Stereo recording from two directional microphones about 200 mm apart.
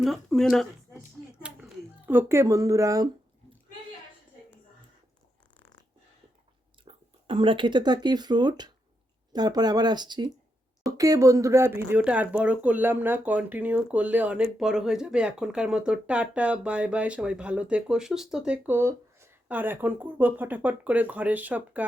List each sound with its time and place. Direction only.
0.0 s speech: centre (ahead or behind)
1.4 s a sound: 5° right (ahead or behind)
6.8 s speech: 25° right (ahead or behind); by 21.8 s 10° right (ahead or behind)